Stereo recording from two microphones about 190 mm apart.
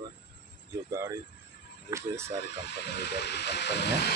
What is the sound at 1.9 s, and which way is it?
Speech, 15° right (ahead or behind).